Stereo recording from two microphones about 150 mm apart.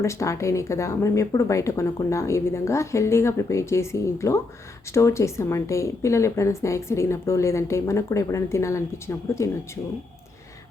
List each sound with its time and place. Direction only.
0.0 s a woman's voice: 20° left (ahead or behind)